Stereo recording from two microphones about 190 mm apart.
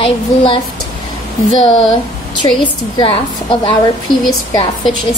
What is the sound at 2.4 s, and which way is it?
Speech, 20° left (ahead or behind).